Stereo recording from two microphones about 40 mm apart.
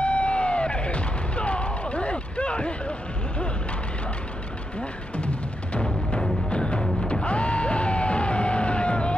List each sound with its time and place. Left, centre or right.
0.0 s music: left
5.1 s music: left